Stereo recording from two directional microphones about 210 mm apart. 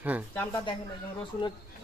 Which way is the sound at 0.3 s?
20° left (ahead or behind).